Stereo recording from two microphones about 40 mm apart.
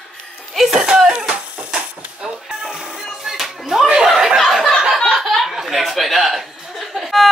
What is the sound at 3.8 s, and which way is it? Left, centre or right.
Chuckle, centre.